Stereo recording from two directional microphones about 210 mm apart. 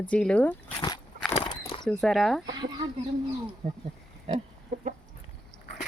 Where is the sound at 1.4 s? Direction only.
25° left (ahead or behind).